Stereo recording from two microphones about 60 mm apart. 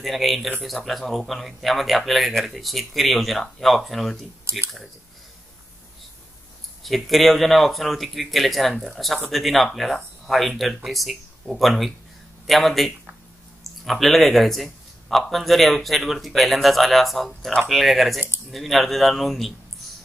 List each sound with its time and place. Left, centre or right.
0.0 s a man's voice: centre
4.5 s speech: right
6.8 s a man's voice: centre